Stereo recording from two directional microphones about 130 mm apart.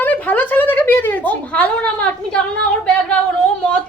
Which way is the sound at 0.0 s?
10° left (ahead or behind).